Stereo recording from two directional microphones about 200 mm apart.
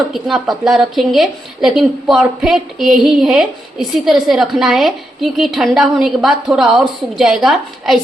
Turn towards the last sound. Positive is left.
turn(degrees=0)  # may be behind; listen again after turning